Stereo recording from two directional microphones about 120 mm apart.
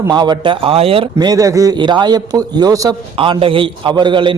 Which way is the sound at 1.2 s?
30° right (ahead or behind).